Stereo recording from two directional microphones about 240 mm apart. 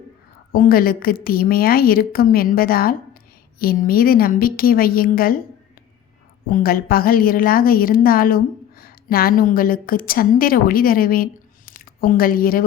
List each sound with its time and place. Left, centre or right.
0.5 s a woman's voice: left
6.5 s a woman's voice: left